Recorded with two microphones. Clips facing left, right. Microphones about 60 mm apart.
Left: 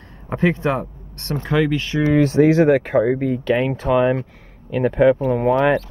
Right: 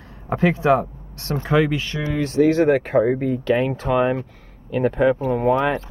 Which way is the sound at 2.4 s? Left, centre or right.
Centre.